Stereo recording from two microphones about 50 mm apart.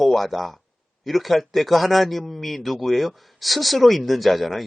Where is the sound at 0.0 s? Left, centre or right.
Centre.